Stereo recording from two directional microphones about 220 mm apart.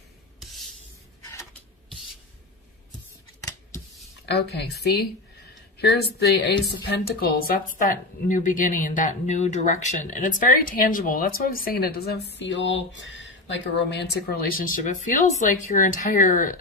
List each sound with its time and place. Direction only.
1.2 s a sound: 15° left (ahead or behind)
4.3 s speech: 50° left (ahead or behind)
6.3 s speech: 50° left (ahead or behind)